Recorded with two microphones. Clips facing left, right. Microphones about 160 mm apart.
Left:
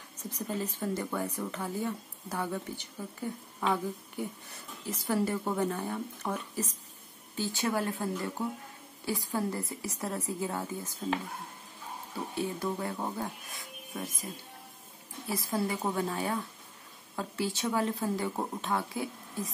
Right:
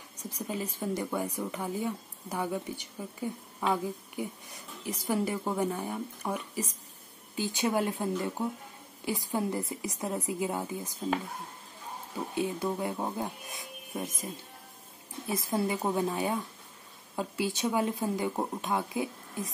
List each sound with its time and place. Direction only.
0.2 s speech: 10° right (ahead or behind)
12.4 s speech: 15° right (ahead or behind)
15.2 s a woman's voice: 20° right (ahead or behind)